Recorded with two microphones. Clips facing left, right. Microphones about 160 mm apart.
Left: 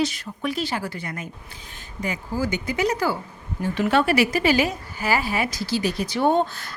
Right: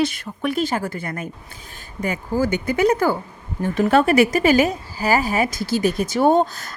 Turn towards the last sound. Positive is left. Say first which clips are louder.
# right 4 dB
turn(degrees=-40)  # may be behind; listen again after turning